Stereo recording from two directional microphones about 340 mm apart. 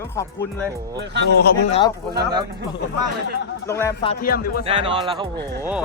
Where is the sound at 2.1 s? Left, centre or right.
Right.